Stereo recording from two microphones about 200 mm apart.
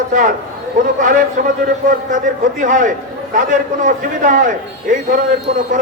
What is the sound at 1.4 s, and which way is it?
Speech, 45° right (ahead or behind).